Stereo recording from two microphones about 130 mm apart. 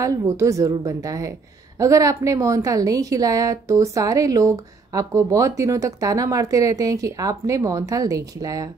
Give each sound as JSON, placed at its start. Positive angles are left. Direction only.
{"t": 0.0, "sound": "a woman's voice", "side_deg": -25}